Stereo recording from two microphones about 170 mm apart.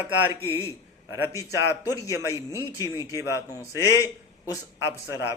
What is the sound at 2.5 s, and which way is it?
Speech, 20° left (ahead or behind).